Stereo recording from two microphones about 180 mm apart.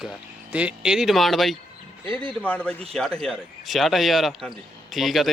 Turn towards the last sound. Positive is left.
turn(degrees=0)  # may be behind; listen again after turning